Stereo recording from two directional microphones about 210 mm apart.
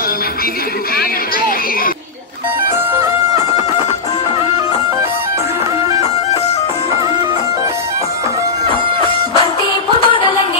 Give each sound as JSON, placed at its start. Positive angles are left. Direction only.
{"t": 9.9, "sound": "music", "side_deg": 25}